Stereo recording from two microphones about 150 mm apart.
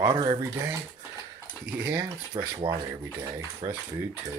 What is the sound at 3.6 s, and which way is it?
Speech, 45° right (ahead or behind).